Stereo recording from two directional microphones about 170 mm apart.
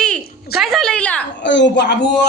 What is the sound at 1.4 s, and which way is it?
Speech, 90° left.